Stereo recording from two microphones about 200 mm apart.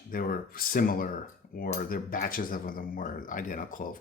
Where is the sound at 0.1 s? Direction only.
45° left (ahead or behind).